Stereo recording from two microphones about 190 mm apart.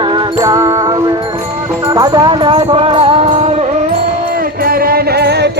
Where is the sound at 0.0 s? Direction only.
25° right (ahead or behind).